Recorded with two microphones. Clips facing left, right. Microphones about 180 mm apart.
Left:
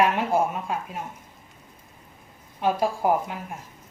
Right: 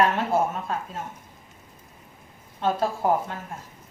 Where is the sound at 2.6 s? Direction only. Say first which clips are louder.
Left 1 dB; 15° left (ahead or behind).